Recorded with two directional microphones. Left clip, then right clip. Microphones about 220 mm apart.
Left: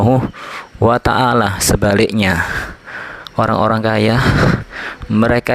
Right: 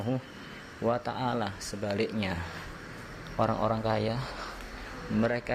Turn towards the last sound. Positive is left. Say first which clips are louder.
# left 15 dB
turn(degrees=45)  # may be behind; listen again after turning